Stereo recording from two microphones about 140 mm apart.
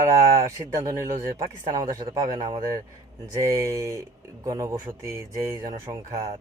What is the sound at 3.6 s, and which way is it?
Speech, 20° right (ahead or behind).